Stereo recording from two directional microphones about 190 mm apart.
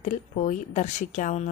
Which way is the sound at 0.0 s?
40° left (ahead or behind).